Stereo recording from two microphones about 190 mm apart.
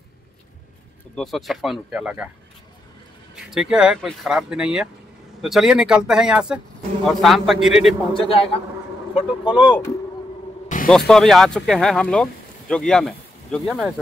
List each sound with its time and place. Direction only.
1.1 s speech: centre (ahead or behind)
3.3 s speech: 5° right (ahead or behind)
8.1 s speech: 30° left (ahead or behind)
10.9 s speech: 5° left (ahead or behind)